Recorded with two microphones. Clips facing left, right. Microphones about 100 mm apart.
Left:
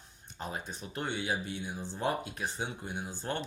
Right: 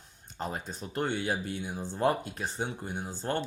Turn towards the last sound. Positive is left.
turn(degrees=-40)  # may be behind; listen again after turning